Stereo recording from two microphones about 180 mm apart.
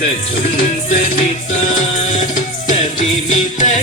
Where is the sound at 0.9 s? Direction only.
45° left (ahead or behind).